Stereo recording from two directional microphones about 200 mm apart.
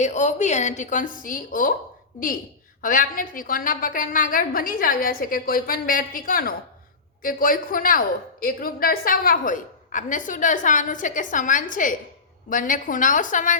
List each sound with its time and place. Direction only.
0.0 s a woman's voice: 35° left (ahead or behind)
2.8 s a woman's voice: 45° left (ahead or behind)